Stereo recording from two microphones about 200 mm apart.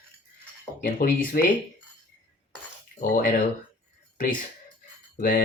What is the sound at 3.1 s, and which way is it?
Speech, 40° left (ahead or behind).